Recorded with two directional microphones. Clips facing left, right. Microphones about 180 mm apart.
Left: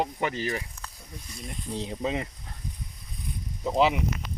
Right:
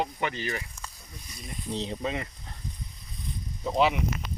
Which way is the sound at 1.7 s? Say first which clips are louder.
Left 1 dB; 10° left (ahead or behind).